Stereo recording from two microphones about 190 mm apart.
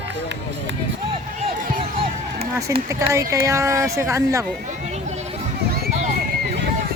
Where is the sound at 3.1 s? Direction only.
15° right (ahead or behind).